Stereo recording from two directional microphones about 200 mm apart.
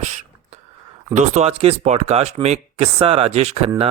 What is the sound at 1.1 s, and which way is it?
Speech, 35° right (ahead or behind).